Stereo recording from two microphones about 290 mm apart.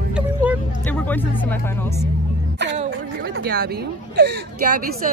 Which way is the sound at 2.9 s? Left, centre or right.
Right.